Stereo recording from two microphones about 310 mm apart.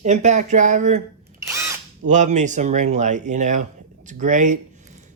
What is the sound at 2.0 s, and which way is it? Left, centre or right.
Speech, right.